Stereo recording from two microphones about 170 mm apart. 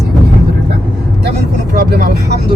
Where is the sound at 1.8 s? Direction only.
70° right (ahead or behind).